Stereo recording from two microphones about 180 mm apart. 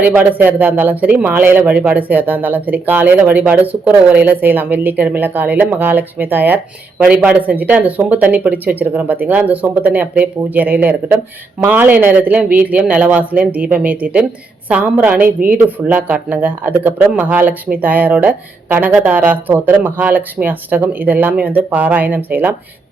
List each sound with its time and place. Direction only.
0.0 s speech: 10° right (ahead or behind)
15.2 s a woman's voice: 50° right (ahead or behind)
15.6 s speech: 10° right (ahead or behind)